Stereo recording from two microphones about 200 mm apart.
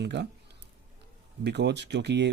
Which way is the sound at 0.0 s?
60° right (ahead or behind).